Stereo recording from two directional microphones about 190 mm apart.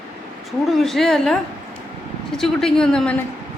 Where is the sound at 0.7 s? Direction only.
Centre (ahead or behind).